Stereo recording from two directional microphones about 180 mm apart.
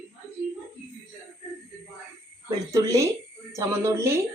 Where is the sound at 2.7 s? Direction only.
15° right (ahead or behind).